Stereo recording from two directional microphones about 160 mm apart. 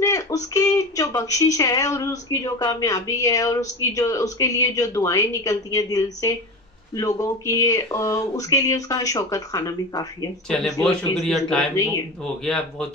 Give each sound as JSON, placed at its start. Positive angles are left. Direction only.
{"t": 0.0, "sound": "speech", "side_deg": 20}
{"t": 10.5, "sound": "a man's voice", "side_deg": 5}
{"t": 11.7, "sound": "speech", "side_deg": 20}
{"t": 12.2, "sound": "a man's voice", "side_deg": 5}